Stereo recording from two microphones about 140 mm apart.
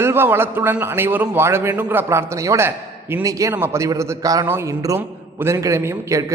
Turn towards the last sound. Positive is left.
turn(degrees=-25)  # may be behind; listen again after turning